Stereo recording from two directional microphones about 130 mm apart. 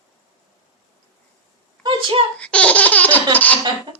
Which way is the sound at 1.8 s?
40° right (ahead or behind).